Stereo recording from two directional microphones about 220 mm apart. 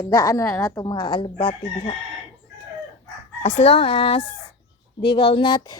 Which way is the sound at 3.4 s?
25° left (ahead or behind).